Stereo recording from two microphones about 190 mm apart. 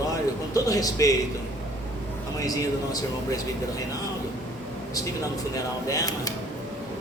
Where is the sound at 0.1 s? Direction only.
20° left (ahead or behind).